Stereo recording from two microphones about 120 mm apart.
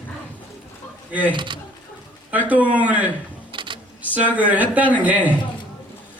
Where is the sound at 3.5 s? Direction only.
40° right (ahead or behind).